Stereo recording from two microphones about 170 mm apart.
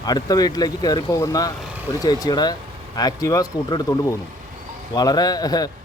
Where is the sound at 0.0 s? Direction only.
20° left (ahead or behind).